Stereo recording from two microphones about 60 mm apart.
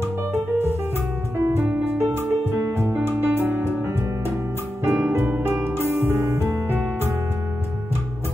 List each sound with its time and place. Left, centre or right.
0.3 s music: right
4.8 s music: right